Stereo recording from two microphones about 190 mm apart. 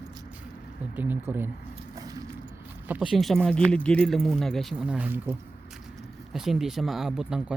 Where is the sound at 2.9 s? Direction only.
Centre (ahead or behind).